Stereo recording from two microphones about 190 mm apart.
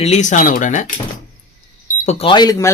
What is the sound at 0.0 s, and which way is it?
Speech, 35° left (ahead or behind).